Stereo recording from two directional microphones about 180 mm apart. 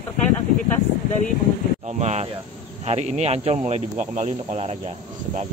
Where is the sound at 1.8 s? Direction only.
40° right (ahead or behind).